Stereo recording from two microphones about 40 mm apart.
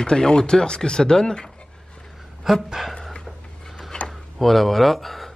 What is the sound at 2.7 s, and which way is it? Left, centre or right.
Speech, centre.